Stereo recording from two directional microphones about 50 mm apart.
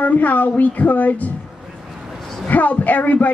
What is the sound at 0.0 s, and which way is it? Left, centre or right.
A woman's voice, left.